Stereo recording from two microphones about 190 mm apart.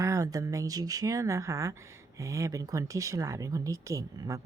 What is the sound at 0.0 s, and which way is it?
Speech, 15° right (ahead or behind).